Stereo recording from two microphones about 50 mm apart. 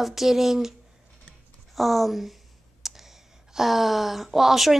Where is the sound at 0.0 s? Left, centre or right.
Centre.